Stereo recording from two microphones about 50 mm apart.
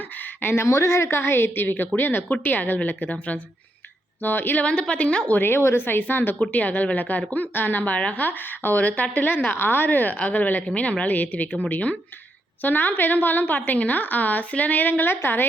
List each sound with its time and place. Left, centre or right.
0.4 s a woman's voice: left
0.7 s a woman's voice: left
4.2 s a woman's voice: left
4.6 s speech: left
5.4 s a woman's voice: left
12.6 s a woman's voice: left